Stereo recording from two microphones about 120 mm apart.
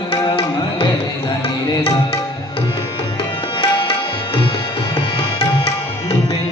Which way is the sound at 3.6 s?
45° left (ahead or behind).